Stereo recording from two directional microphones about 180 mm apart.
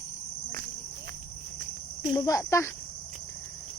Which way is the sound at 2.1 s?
20° left (ahead or behind).